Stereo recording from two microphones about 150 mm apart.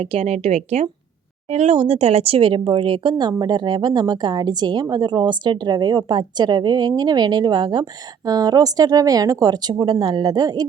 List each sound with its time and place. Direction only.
0.0 s speech: 40° right (ahead or behind); by 10.7 s 25° right (ahead or behind)